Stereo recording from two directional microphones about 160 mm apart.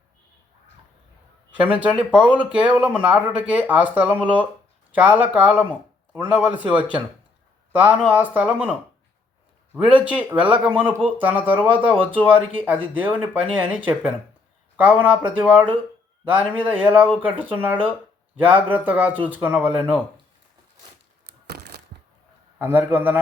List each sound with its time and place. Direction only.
1.5 s speech: 10° right (ahead or behind)
9.7 s speech: 10° right (ahead or behind)
18.3 s speech: 10° right (ahead or behind)
21.2 s a sound: 85° right
22.5 s speech: 10° right (ahead or behind)